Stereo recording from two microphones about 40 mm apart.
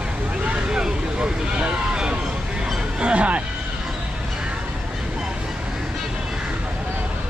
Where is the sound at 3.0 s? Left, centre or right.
Right.